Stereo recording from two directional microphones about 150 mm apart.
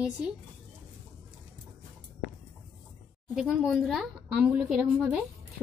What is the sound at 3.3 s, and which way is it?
A woman's voice, centre (ahead or behind).